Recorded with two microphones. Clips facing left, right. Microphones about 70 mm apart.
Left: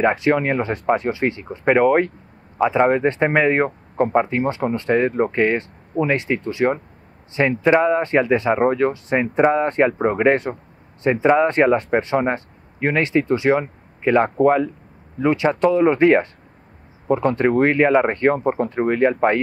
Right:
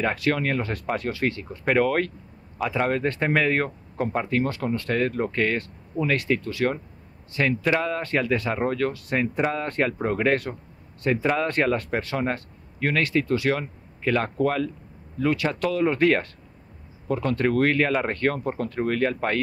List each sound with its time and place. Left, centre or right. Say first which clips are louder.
0.0 s speech: left 7 dB; left